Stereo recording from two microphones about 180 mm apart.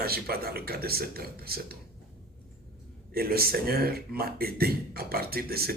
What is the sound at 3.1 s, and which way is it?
Speech, 55° right (ahead or behind).